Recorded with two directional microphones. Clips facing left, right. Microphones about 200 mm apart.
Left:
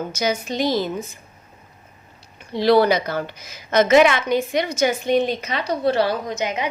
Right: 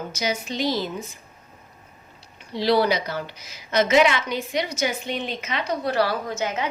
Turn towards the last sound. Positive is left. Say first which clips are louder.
# left 2 dB
turn(degrees=15)  # may be behind; listen again after turning